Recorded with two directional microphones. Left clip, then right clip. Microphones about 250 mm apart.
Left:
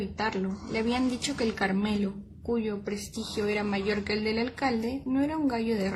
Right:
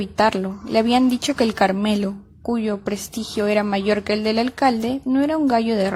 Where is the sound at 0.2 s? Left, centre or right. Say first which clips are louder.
Right 14 dB; right.